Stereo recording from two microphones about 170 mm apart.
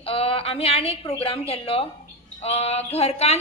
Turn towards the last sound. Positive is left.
turn(degrees=40)  # may be behind; listen again after turning